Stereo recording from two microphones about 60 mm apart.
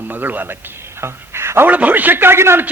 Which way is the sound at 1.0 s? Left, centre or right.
Right.